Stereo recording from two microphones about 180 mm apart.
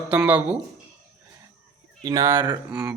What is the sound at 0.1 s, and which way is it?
Speech, 10° right (ahead or behind).